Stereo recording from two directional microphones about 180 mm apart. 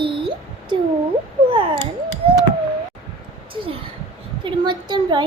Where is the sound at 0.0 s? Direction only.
30° right (ahead or behind).